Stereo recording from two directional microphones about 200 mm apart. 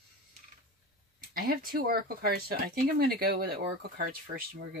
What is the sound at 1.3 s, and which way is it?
Speech, 45° right (ahead or behind).